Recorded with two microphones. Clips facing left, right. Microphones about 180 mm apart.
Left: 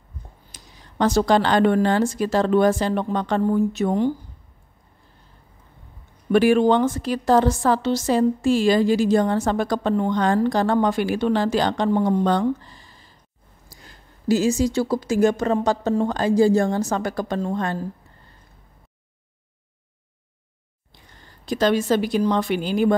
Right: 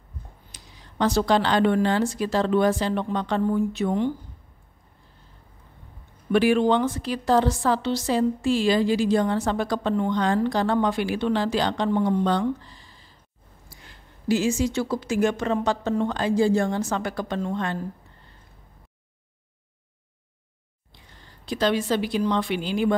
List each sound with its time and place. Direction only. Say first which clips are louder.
0.5 s a woman's voice: left 1 dB; 45° left (ahead or behind)
6.3 s a woman's voice: left 3 dB; 45° left (ahead or behind)
21.5 s a woman's voice: left 4 dB; 45° left (ahead or behind)